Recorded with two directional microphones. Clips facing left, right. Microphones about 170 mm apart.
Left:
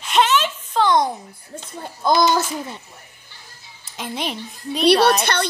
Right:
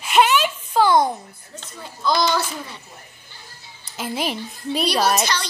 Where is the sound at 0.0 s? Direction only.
10° right (ahead or behind).